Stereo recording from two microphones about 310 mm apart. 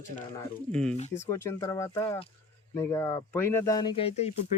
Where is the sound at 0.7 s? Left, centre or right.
Centre.